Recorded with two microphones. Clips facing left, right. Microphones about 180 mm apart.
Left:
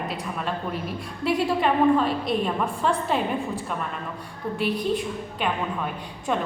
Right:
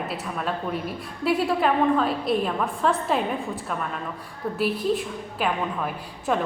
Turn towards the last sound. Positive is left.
turn(degrees=0)  # may be behind; listen again after turning